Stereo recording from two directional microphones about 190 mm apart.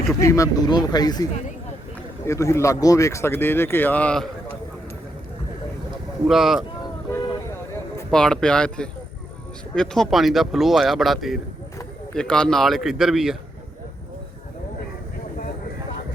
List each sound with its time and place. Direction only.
0.1 s speech: 15° left (ahead or behind)
6.2 s speech: centre (ahead or behind)
8.1 s speech: 5° left (ahead or behind)